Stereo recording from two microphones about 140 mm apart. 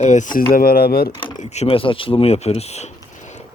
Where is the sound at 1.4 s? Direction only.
50° left (ahead or behind).